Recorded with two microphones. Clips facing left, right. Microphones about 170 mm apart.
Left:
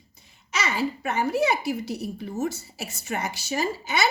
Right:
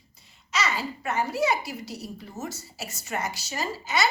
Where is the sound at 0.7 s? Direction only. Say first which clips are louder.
Left 3 dB; 60° left (ahead or behind).